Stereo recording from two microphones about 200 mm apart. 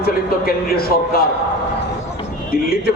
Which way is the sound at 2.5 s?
50° left (ahead or behind).